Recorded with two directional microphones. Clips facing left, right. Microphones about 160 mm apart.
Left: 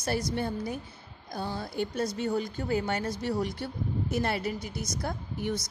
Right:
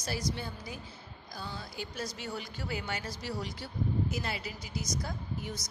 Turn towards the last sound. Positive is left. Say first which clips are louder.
# left 7 dB
turn(degrees=60)  # may be behind; listen again after turning